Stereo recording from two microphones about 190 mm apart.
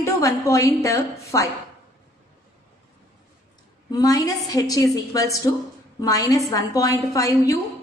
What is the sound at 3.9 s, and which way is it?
A woman's voice, 20° left (ahead or behind).